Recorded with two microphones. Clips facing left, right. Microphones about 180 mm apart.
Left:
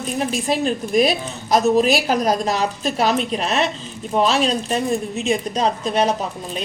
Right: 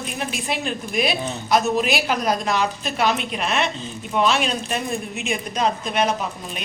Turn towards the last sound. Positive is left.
turn(degrees=35)  # may be behind; listen again after turning